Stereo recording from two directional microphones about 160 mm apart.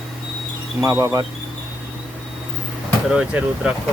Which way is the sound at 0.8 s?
20° right (ahead or behind).